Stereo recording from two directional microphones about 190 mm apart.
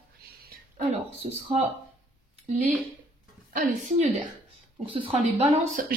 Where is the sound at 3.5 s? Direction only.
45° right (ahead or behind).